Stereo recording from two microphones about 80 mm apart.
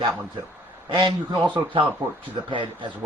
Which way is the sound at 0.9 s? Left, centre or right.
Right.